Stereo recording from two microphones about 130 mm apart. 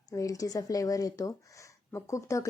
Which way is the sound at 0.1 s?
25° left (ahead or behind).